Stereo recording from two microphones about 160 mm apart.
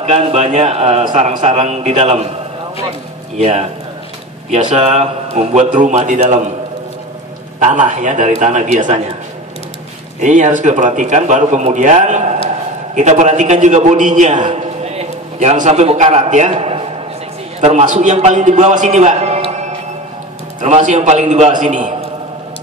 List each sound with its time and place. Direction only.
0.0 s speech: 40° right (ahead or behind)
3.3 s speech: 45° right (ahead or behind)
7.6 s speech: 50° right (ahead or behind)
10.2 s a man's voice: 50° right (ahead or behind)
20.6 s speech: 45° right (ahead or behind)